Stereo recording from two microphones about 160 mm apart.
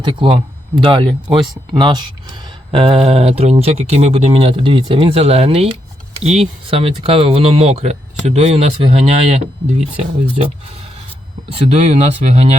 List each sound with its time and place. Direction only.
0.0 s speech: 30° right (ahead or behind)
11.5 s speech: 40° right (ahead or behind)